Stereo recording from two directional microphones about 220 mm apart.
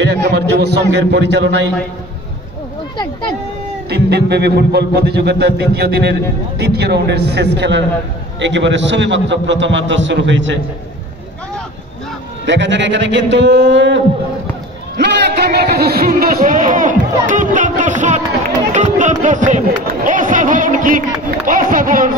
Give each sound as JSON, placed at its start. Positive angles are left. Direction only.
{"t": 0.0, "sound": "a man's voice", "side_deg": -50}
{"t": 3.0, "sound": "speech", "side_deg": 20}
{"t": 3.9, "sound": "a man's voice", "side_deg": -50}
{"t": 12.4, "sound": "a man's voice", "side_deg": -55}